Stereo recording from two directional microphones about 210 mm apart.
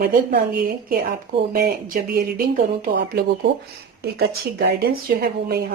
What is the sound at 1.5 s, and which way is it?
Speech, 45° right (ahead or behind).